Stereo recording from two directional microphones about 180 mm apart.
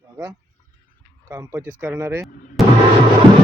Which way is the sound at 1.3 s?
15° right (ahead or behind).